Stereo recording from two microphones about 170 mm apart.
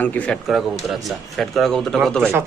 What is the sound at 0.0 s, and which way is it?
A man's voice, 10° left (ahead or behind).